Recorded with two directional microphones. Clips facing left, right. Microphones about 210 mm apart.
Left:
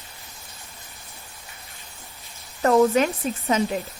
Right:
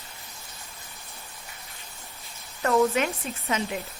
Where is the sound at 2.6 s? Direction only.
40° left (ahead or behind).